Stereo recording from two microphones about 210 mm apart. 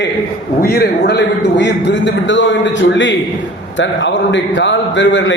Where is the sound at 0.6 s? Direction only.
45° left (ahead or behind).